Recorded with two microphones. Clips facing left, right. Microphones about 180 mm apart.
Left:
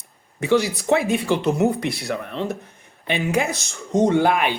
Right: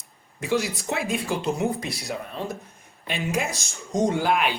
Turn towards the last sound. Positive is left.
turn(degrees=55)  # may be behind; listen again after turning